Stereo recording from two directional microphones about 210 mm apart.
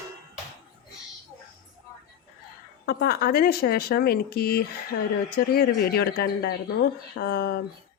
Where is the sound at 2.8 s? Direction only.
45° left (ahead or behind).